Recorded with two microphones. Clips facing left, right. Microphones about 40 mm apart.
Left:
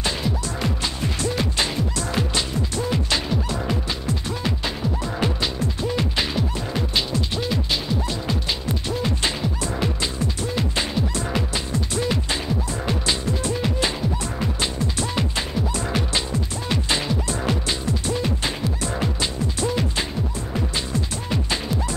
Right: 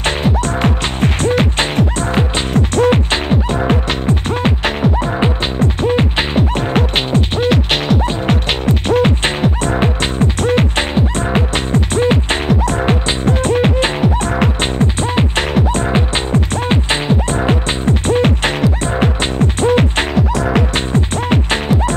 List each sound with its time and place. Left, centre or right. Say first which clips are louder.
0.0 s music: right 9 dB; right
2.5 s music: right 12 dB; right
7.5 s music: right 10 dB; right
8.0 s music: right 9 dB; right
15.3 s music: right 10 dB; right
20.9 s music: right 10 dB; right